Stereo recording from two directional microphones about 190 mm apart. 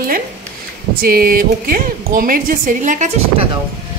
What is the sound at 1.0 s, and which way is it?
A woman's voice, 50° right (ahead or behind).